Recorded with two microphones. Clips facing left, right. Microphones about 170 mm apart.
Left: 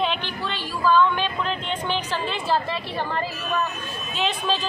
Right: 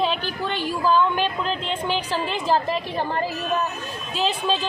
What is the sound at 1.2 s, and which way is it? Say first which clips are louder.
A woman's voice: right 2 dB; 35° right (ahead or behind).